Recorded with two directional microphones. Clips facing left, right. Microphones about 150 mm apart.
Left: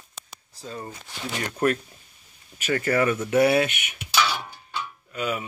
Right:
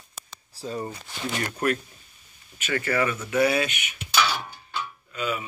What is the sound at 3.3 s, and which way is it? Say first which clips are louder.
Speech: left 3 dB; 50° left (ahead or behind).